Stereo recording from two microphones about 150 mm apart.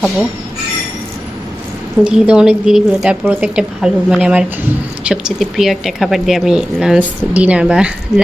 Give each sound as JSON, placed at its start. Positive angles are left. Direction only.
{"t": 2.0, "sound": "a woman's voice", "side_deg": -5}